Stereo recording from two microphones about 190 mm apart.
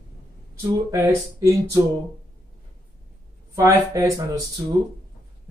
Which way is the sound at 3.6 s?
15° right (ahead or behind).